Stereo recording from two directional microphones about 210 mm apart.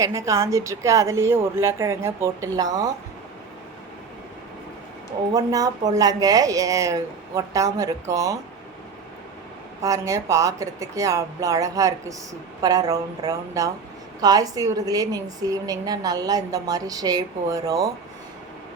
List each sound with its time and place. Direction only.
0.0 s a woman's voice: 15° right (ahead or behind)
5.3 s a woman's voice: 15° right (ahead or behind)
9.8 s a woman's voice: 15° right (ahead or behind)